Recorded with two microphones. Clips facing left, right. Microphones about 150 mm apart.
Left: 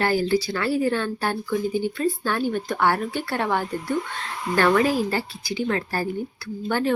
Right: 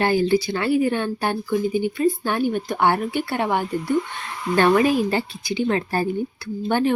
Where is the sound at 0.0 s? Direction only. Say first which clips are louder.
Right 3 dB; 20° right (ahead or behind).